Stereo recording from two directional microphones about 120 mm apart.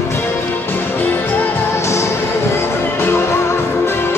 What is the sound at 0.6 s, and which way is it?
Music, 15° left (ahead or behind).